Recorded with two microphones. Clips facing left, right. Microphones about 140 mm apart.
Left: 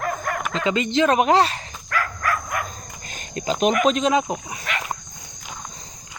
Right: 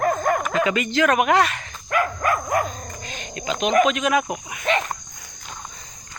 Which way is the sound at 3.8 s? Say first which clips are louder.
Left 2 dB; 30° left (ahead or behind).